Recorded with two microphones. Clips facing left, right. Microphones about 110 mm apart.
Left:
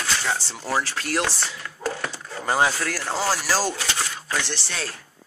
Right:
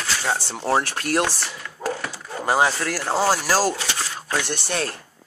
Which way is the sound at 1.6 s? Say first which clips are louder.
Right 2 dB; 5° right (ahead or behind).